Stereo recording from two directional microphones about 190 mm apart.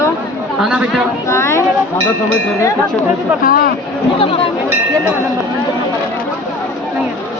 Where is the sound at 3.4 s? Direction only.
50° left (ahead or behind).